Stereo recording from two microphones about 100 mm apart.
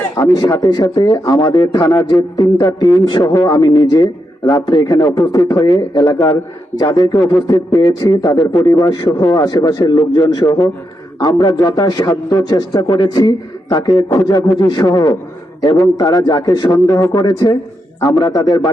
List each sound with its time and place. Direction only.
0.2 s a man's voice: 40° left (ahead or behind)
16.8 s speech: 30° left (ahead or behind)
17.2 s a man's voice: 45° left (ahead or behind)